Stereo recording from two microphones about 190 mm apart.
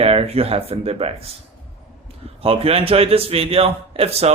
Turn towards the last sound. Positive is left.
turn(degrees=-35)  # may be behind; listen again after turning